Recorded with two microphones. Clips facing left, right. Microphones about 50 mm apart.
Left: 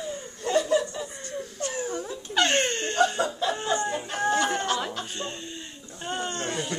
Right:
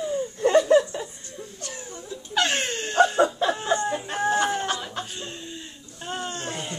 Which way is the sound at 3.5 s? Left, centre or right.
Centre.